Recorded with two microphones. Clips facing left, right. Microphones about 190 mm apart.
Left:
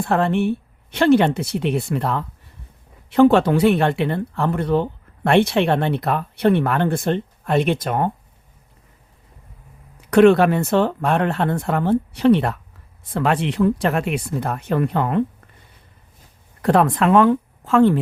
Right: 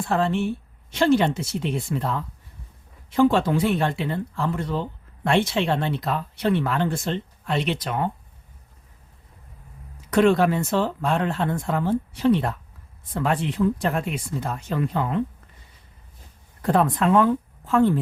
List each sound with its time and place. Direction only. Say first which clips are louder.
0.0 s speech: left 4 dB; 60° left (ahead or behind)
10.0 s speech: left 6 dB; 65° left (ahead or behind)
16.6 s speech: left 4 dB; 75° left (ahead or behind)